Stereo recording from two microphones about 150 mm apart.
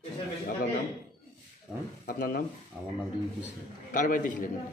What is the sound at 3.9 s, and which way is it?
Speech, 60° left (ahead or behind).